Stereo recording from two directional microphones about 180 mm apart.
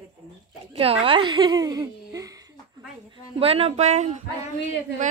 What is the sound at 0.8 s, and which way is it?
Speech, 30° right (ahead or behind).